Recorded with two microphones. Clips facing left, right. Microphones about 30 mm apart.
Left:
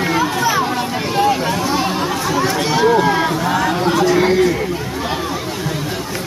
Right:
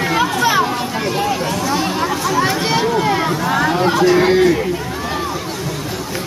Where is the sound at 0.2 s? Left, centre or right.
Centre.